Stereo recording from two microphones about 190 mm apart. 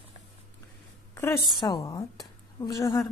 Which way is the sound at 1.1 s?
15° left (ahead or behind).